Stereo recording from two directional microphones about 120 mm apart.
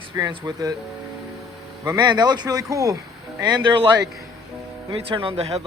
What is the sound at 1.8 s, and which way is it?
A man's voice, 30° right (ahead or behind).